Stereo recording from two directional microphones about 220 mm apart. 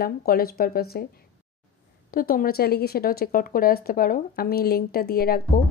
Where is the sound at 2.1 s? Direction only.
40° left (ahead or behind).